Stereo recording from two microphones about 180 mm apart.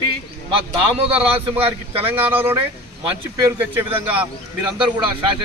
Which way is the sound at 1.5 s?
30° right (ahead or behind).